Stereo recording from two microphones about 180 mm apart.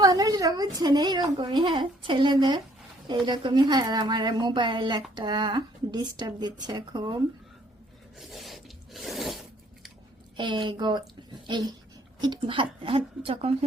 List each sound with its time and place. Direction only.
0.0 s a woman's voice: 20° right (ahead or behind)
8.2 s a sound: centre (ahead or behind)
10.3 s a woman's voice: 25° right (ahead or behind)
12.2 s a woman's voice: 25° right (ahead or behind)